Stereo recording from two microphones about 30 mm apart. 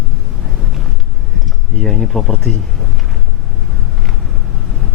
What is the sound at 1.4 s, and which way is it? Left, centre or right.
Speech, centre.